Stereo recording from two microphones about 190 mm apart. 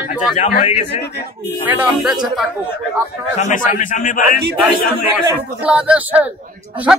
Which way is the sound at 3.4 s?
40° left (ahead or behind).